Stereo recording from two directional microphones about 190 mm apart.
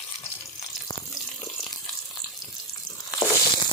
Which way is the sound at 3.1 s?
20° left (ahead or behind).